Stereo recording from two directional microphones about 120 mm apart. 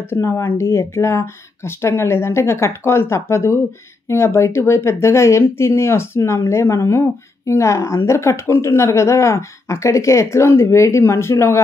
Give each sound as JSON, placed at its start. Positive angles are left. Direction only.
{"t": 0.1, "sound": "speech", "side_deg": 20}